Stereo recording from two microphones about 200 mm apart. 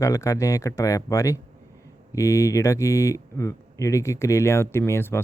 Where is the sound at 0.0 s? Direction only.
15° left (ahead or behind).